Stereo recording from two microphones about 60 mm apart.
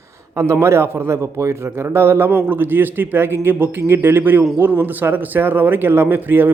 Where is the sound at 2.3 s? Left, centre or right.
Right.